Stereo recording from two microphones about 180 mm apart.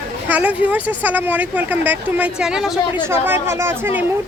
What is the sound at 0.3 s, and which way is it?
Speech, 10° right (ahead or behind).